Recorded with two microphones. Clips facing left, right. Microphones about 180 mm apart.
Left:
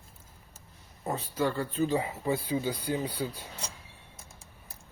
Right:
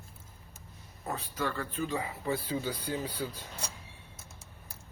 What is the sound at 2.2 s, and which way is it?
Speech, 15° left (ahead or behind).